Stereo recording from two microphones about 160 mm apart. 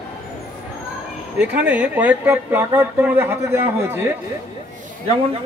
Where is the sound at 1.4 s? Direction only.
10° right (ahead or behind).